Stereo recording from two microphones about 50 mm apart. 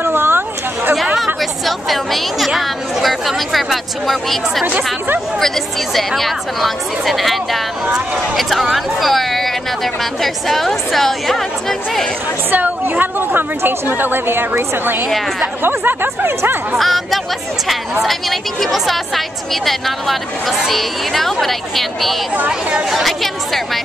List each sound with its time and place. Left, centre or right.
0.0 s a sound: right
1.1 s speech: centre
5.9 s speech: centre
12.4 s a woman's voice: right
16.7 s speech: centre